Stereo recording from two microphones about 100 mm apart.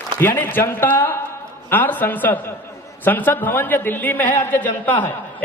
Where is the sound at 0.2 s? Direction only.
25° left (ahead or behind).